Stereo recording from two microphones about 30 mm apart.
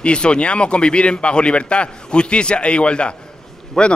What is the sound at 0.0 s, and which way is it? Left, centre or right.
Speech, left.